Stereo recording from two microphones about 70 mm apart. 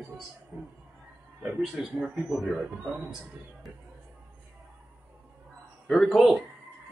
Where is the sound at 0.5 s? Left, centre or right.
Right.